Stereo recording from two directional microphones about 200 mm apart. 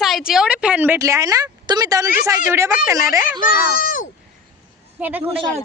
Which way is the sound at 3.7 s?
45° left (ahead or behind).